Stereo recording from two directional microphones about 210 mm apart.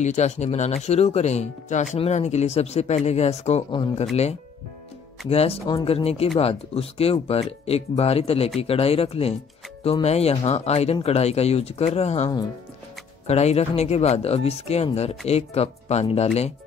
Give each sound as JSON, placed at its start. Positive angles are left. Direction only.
{"t": 0.0, "sound": "speech", "side_deg": 35}
{"t": 5.3, "sound": "speech", "side_deg": 30}